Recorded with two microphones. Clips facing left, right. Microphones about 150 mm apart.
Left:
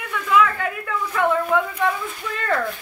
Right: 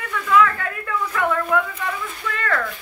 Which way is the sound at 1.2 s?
25° left (ahead or behind).